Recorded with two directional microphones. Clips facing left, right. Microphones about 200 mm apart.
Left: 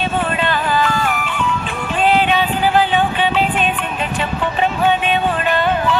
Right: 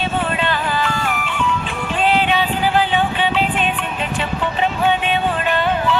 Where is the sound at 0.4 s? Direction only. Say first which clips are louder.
Left 3 dB; 45° left (ahead or behind).